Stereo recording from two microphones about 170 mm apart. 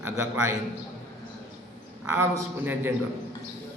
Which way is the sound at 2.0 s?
10° right (ahead or behind).